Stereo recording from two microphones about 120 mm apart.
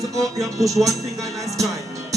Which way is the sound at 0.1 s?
30° right (ahead or behind).